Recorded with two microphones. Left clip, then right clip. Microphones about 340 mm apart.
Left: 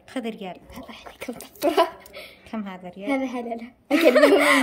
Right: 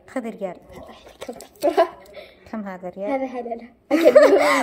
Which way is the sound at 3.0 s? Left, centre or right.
Left.